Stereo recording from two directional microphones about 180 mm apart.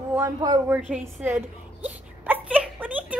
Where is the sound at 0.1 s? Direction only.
20° right (ahead or behind).